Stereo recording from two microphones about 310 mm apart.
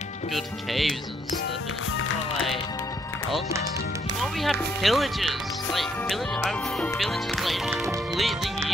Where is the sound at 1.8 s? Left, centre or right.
Left.